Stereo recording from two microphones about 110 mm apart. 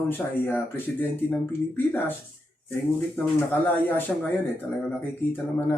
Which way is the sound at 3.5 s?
20° left (ahead or behind).